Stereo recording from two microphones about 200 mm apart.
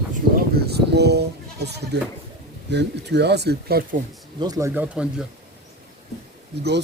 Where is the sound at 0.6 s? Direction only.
55° right (ahead or behind).